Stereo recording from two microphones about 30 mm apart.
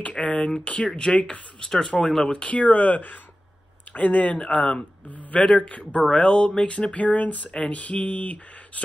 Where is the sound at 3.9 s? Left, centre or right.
Left.